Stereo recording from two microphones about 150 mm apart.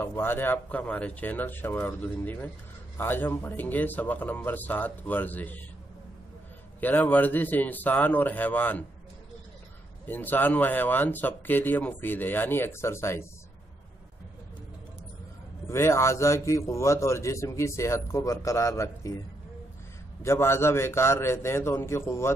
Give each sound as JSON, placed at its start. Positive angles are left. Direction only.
{"t": 0.0, "sound": "speech", "side_deg": 15}
{"t": 6.8, "sound": "speech", "side_deg": 10}
{"t": 10.0, "sound": "speech", "side_deg": 10}
{"t": 15.6, "sound": "a man's voice", "side_deg": 15}
{"t": 20.2, "sound": "speech", "side_deg": 15}